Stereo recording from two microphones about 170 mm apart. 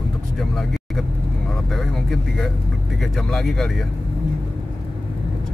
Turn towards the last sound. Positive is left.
turn(degrees=0)  # may be behind; listen again after turning